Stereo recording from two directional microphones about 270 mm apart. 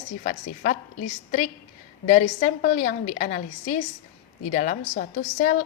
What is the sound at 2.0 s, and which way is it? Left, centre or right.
A woman's voice, left.